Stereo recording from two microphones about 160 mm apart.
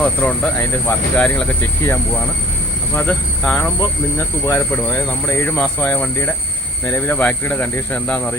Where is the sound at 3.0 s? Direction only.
5° left (ahead or behind).